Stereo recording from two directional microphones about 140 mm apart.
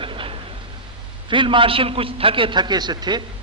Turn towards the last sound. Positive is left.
turn(degrees=-30)  # may be behind; listen again after turning